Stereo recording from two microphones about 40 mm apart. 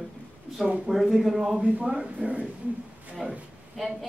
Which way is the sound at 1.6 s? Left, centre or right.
Right.